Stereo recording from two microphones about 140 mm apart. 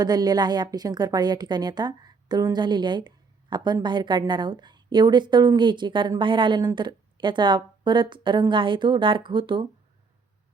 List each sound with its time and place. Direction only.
0.0 s a woman's voice: 30° right (ahead or behind)